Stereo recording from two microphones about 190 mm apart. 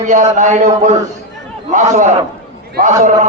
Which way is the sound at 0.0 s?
40° right (ahead or behind).